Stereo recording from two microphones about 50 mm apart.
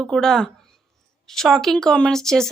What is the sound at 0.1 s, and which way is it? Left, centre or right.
Speech, centre.